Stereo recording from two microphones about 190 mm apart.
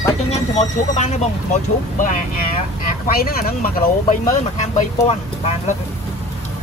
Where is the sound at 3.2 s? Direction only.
50° left (ahead or behind).